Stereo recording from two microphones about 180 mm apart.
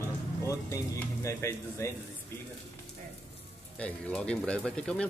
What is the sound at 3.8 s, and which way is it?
Speech, 5° left (ahead or behind).